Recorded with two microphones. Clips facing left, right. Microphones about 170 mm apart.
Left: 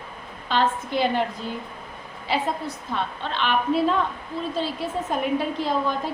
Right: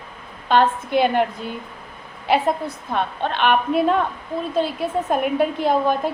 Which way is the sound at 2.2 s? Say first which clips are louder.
Right 6 dB; 60° right (ahead or behind).